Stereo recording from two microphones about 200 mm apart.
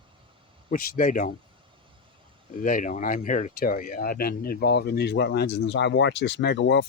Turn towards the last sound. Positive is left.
turn(degrees=60)  # may be behind; listen again after turning